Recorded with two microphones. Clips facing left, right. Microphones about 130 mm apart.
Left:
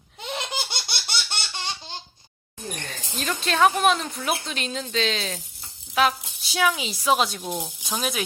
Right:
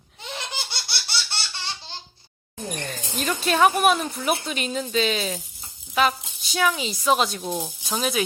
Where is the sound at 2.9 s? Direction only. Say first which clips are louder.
Right 2 dB; centre (ahead or behind).